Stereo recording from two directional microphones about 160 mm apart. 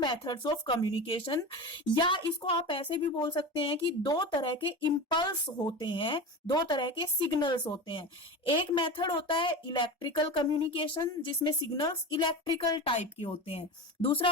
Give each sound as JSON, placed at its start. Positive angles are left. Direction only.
{"t": 0.0, "sound": "a woman's voice", "side_deg": 30}